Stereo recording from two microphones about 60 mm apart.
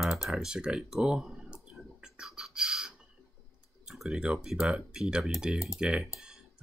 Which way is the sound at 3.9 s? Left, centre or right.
Centre.